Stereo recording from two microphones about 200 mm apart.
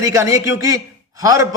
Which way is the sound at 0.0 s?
15° right (ahead or behind).